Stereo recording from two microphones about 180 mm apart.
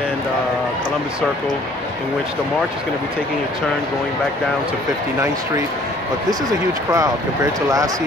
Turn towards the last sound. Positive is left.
turn(degrees=-20)  # may be behind; listen again after turning